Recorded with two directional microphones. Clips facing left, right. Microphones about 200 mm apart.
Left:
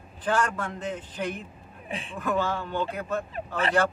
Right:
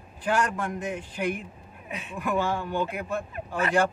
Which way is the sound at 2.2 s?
15° right (ahead or behind).